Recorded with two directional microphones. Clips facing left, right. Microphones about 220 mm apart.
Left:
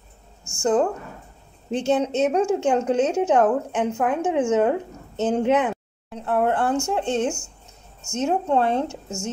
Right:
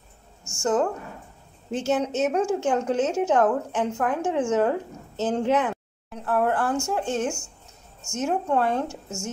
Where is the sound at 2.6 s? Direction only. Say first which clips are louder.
Left 3 dB; 20° left (ahead or behind).